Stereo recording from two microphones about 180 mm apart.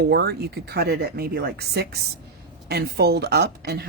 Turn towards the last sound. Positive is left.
turn(degrees=-60)  # may be behind; listen again after turning